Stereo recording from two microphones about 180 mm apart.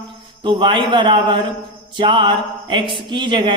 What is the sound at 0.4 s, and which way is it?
A woman's voice, 25° right (ahead or behind).